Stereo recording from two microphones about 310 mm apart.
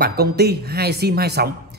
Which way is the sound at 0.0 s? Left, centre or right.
Right.